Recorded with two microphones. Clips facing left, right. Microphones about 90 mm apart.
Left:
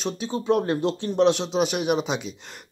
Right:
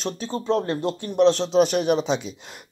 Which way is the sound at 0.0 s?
10° left (ahead or behind).